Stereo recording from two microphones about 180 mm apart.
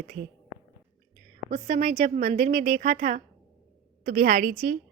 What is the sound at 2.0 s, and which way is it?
A woman's voice, 55° right (ahead or behind).